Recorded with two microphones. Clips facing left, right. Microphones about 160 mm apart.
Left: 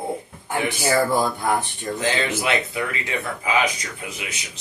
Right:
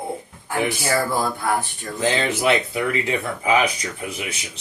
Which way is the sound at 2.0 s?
30° right (ahead or behind).